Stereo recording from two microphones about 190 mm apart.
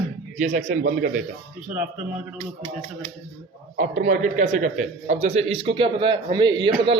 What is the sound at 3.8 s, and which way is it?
A man's voice, 40° right (ahead or behind).